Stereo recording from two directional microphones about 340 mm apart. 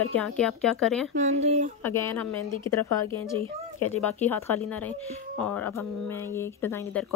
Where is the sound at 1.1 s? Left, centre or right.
Centre.